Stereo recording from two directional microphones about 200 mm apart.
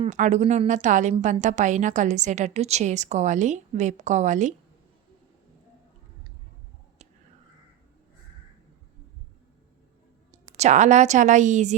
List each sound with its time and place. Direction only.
0.0 s a woman's voice: 35° right (ahead or behind)
10.6 s a woman's voice: 35° right (ahead or behind)